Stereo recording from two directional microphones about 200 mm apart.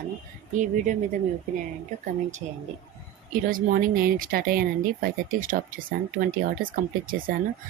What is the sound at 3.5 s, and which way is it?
Speech, 45° right (ahead or behind).